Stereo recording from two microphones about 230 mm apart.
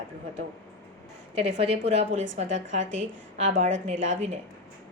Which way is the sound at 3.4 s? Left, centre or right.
Right.